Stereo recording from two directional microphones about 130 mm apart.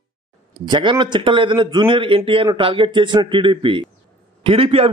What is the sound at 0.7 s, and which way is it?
Speech, 40° right (ahead or behind).